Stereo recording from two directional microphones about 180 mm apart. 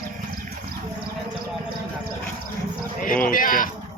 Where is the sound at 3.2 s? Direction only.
50° left (ahead or behind).